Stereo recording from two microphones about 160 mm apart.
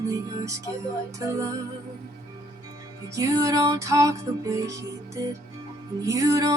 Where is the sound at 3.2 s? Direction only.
20° right (ahead or behind).